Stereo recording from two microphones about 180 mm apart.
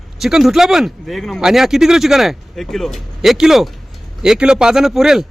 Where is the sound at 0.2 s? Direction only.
Centre (ahead or behind).